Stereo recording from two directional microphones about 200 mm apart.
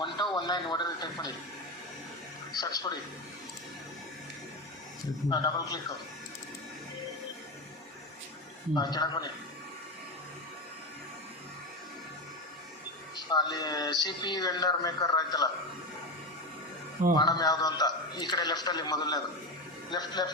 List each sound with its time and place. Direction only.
0.3 s speech: 20° left (ahead or behind)
2.5 s speech: 20° left (ahead or behind)
5.3 s speech: 20° left (ahead or behind)
8.7 s speech: 20° left (ahead or behind)
13.1 s speech: 20° left (ahead or behind)
17.2 s speech: 20° left (ahead or behind)